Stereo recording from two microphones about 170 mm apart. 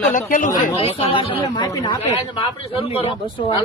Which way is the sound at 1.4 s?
25° left (ahead or behind).